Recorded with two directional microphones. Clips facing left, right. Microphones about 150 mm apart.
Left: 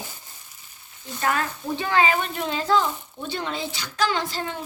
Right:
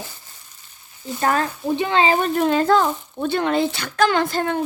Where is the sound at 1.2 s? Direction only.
35° right (ahead or behind).